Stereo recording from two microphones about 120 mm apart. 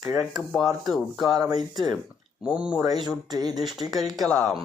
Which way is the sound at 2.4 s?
10° right (ahead or behind).